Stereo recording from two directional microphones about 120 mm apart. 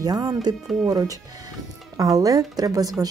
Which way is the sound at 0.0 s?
30° right (ahead or behind).